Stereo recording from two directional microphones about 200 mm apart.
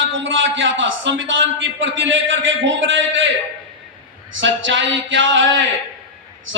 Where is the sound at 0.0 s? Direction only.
70° right (ahead or behind).